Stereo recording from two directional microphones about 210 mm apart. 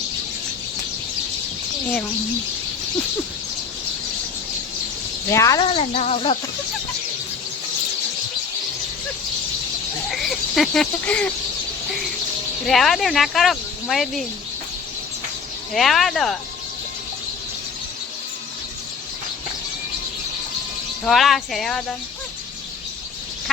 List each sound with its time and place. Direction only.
5.3 s speech: 15° left (ahead or behind)
5.6 s speech: 30° left (ahead or behind)
10.1 s speech: centre (ahead or behind)
12.6 s speech: centre (ahead or behind)
15.7 s speech: centre (ahead or behind)
21.0 s speech: centre (ahead or behind)